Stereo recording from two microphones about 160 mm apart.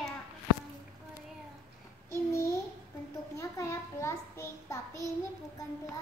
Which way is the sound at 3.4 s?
15° left (ahead or behind).